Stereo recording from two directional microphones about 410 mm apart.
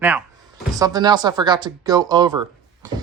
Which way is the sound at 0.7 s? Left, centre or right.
Centre.